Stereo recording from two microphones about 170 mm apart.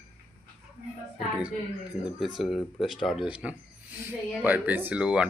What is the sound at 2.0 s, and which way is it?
Speech, centre (ahead or behind).